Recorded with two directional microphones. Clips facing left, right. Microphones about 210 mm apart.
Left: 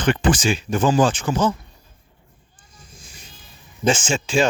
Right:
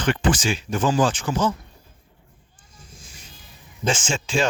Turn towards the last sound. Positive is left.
turn(degrees=5)  # may be behind; listen again after turning